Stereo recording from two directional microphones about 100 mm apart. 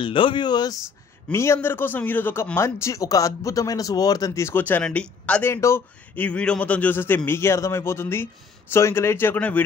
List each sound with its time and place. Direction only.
0.0 s speech: 55° left (ahead or behind)
1.3 s a man's voice: 25° left (ahead or behind)
5.5 s a man's voice: 30° left (ahead or behind)
6.1 s a man's voice: 15° left (ahead or behind)